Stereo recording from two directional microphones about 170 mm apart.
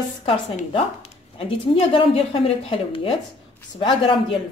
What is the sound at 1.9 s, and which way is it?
A woman's voice, 35° left (ahead or behind).